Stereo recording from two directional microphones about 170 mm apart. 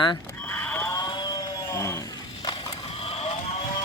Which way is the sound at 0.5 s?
10° left (ahead or behind).